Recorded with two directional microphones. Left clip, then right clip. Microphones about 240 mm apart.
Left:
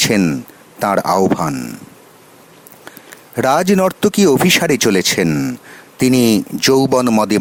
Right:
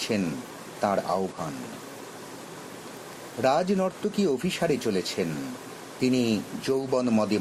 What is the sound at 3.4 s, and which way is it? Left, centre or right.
Speech, left.